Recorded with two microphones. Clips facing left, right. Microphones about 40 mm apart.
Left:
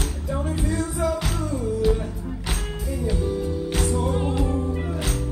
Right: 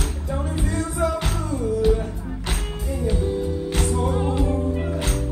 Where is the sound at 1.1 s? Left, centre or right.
Right.